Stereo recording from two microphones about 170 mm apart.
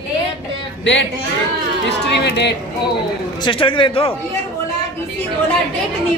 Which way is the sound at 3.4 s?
30° left (ahead or behind).